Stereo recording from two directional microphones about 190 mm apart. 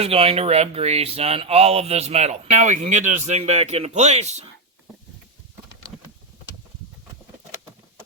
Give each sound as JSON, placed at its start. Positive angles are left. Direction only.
{"t": 0.0, "sound": "speech", "side_deg": -30}